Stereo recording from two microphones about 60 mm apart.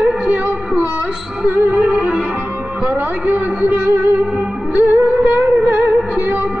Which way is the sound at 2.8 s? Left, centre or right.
Right.